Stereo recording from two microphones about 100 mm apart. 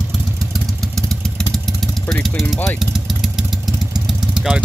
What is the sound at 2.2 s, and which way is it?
Speech, centre (ahead or behind).